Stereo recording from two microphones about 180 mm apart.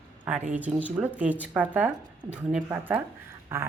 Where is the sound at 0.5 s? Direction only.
10° right (ahead or behind).